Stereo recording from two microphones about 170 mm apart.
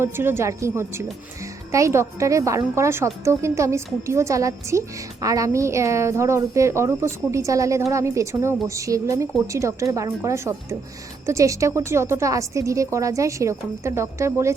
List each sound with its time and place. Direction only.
0.0 s a woman's voice: 15° right (ahead or behind)